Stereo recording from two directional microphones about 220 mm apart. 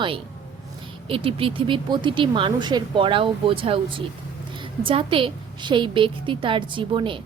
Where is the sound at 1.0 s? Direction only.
25° right (ahead or behind).